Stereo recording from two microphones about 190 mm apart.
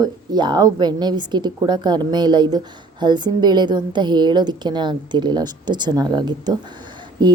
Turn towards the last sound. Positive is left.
turn(degrees=-25)  # may be behind; listen again after turning